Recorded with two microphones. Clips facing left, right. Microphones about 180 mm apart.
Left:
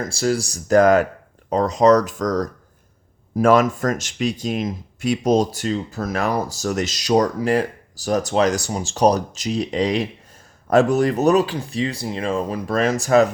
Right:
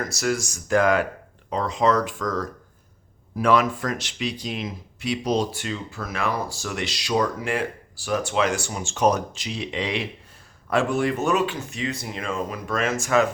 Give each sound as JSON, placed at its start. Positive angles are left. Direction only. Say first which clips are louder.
{"t": 0.0, "sound": "speech", "louder": "left 4 dB", "side_deg": 30}